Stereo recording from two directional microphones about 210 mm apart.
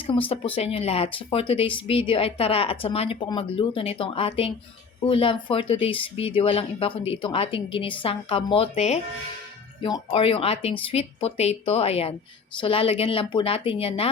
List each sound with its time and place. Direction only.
0.1 s speech: 25° left (ahead or behind)